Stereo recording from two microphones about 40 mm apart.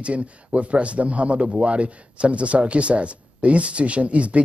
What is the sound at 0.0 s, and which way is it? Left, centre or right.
A man's voice, right.